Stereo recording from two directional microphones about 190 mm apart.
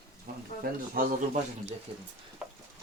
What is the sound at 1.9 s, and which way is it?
Speech, 30° right (ahead or behind).